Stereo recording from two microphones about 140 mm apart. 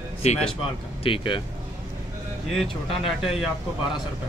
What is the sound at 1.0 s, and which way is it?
Speech, 40° left (ahead or behind).